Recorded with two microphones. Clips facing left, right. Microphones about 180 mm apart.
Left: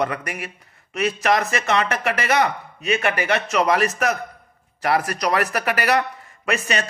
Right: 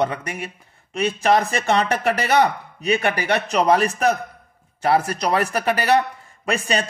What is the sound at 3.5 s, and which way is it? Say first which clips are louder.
Speech: right 3 dB; 35° right (ahead or behind).